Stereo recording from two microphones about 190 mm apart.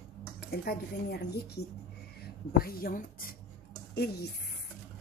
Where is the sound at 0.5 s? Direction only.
55° left (ahead or behind).